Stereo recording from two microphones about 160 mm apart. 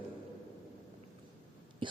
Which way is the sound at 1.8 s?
30° right (ahead or behind).